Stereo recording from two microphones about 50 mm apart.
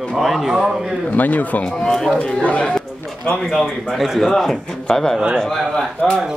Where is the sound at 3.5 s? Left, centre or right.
Centre.